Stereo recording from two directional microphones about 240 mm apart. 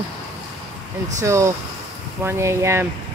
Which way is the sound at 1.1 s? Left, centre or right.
Centre.